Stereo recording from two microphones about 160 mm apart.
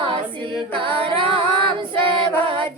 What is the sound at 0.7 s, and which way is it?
A capella, 30° right (ahead or behind).